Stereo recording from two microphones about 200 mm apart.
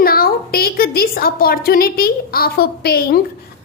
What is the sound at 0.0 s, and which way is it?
A woman's voice, 50° left (ahead or behind).